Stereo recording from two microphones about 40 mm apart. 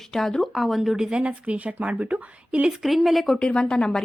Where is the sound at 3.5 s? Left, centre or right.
Left.